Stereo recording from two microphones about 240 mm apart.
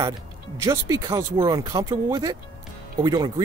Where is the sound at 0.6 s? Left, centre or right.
Centre.